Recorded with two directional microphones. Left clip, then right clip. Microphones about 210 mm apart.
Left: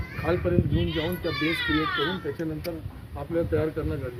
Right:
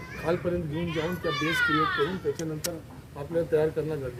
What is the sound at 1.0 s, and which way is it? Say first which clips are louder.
A child's voice: right 1 dB; 10° right (ahead or behind).